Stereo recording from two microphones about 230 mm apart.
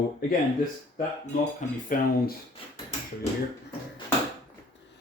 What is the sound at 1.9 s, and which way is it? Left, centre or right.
Speech, left.